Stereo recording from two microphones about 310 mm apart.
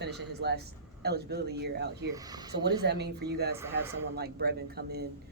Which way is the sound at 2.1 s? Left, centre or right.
Centre.